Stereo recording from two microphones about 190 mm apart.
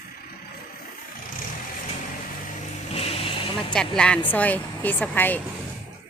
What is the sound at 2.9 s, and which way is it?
Vehicle, 30° left (ahead or behind).